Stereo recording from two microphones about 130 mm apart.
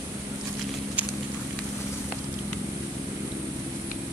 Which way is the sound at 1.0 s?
15° right (ahead or behind).